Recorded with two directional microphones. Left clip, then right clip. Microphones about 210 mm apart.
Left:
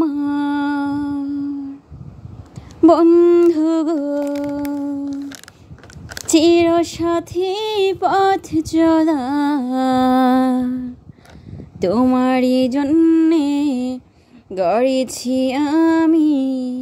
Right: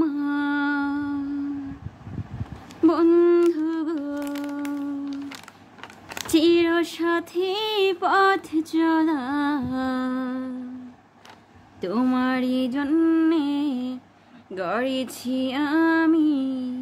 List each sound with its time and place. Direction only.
0.0 s music: 25° left (ahead or behind)
2.9 s speech: 25° left (ahead or behind)
3.5 s humming: 30° left (ahead or behind)
4.1 s humming: 5° left (ahead or behind)
6.2 s female singing: 30° left (ahead or behind); by 10.6 s 45° left (ahead or behind)
11.8 s music: 30° left (ahead or behind)
14.5 s female singing: 30° left (ahead or behind)